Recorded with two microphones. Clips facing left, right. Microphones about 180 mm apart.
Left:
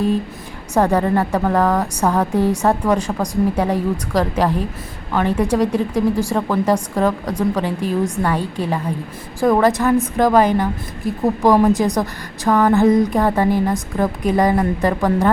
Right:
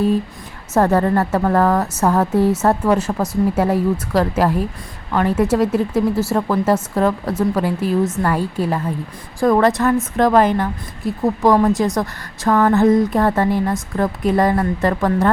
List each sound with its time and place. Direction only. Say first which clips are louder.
0.7 s speech: right 1 dB; 5° right (ahead or behind)
14.5 s speech: left 1 dB; 15° left (ahead or behind)
14.8 s speech: right 1 dB; centre (ahead or behind)